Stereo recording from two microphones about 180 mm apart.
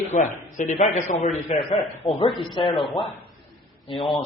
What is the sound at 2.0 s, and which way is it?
Speech, 25° left (ahead or behind).